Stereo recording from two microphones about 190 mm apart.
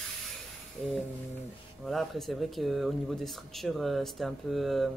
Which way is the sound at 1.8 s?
Centre (ahead or behind).